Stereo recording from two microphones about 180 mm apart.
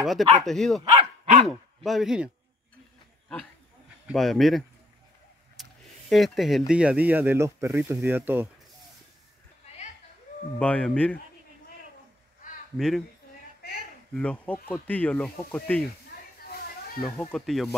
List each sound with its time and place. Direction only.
0.4 s speech: centre (ahead or behind)
0.9 s dog: 40° right (ahead or behind)
1.5 s speech: centre (ahead or behind)
4.1 s speech: centre (ahead or behind)
5.6 s vehicle: centre (ahead or behind)
6.7 s speech: 5° right (ahead or behind)
10.6 s speech: 5° left (ahead or behind)
12.7 s speech: centre (ahead or behind)
14.1 s speech: 5° left (ahead or behind)
16.4 s children playing: 55° left (ahead or behind)
17.0 s speech: 5° left (ahead or behind)